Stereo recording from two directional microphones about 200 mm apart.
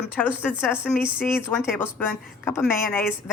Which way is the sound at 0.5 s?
5° right (ahead or behind).